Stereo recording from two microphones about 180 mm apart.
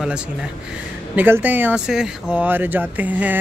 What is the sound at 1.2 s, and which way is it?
Speech, 10° right (ahead or behind).